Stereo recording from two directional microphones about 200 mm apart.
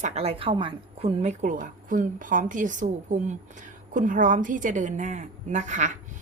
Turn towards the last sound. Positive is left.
turn(degrees=-35)  # may be behind; listen again after turning